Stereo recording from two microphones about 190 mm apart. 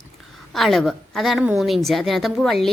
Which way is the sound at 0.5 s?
Centre (ahead or behind).